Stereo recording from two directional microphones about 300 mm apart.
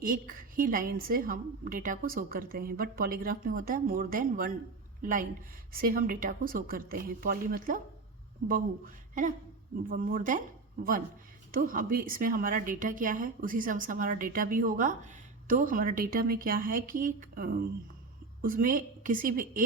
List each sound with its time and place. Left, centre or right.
0.0 s a woman's voice: right
9.9 s a woman's voice: right
11.5 s a woman's voice: right